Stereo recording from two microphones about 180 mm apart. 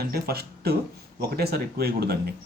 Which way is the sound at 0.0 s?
60° right (ahead or behind).